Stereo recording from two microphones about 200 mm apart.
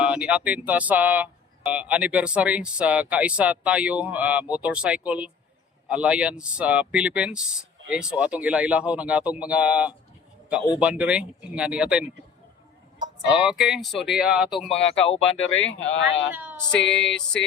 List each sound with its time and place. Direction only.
0.0 s speech: 5° right (ahead or behind)
13.3 s speech: 5° right (ahead or behind)
15.0 s speech: 30° left (ahead or behind)
15.6 s speech: 70° left (ahead or behind)
16.3 s speech: 10° right (ahead or behind)
16.8 s speech: centre (ahead or behind)